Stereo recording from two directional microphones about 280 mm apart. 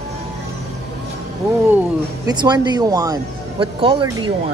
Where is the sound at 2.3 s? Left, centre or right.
Centre.